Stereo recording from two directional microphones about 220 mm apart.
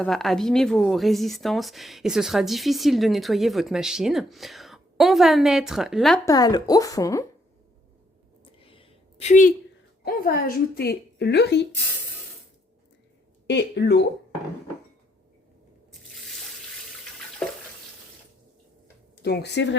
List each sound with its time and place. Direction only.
0.0 s a woman's voice: centre (ahead or behind)
6.2 s a woman's voice: 15° left (ahead or behind)
8.6 s a sound: 25° left (ahead or behind)
10.0 s a woman's voice: 45° left (ahead or behind)
13.5 s a woman's voice: 50° left (ahead or behind)
19.1 s speech: 50° left (ahead or behind)